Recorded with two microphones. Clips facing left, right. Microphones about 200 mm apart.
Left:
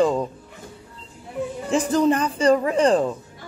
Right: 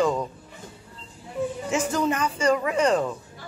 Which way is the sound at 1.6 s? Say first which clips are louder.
Left 7 dB; 35° left (ahead or behind).